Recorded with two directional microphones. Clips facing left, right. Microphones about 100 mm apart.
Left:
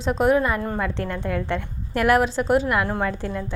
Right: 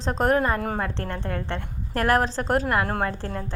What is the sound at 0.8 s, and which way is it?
A woman's voice, 30° right (ahead or behind).